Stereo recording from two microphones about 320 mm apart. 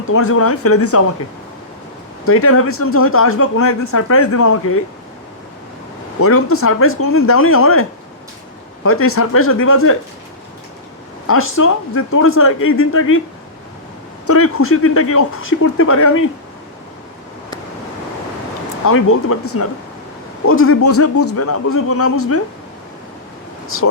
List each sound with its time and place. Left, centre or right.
0.1 s speech: left
2.2 s speech: left
6.1 s speech: left
11.3 s speech: left
14.3 s speech: left
18.9 s speech: left
23.6 s speech: left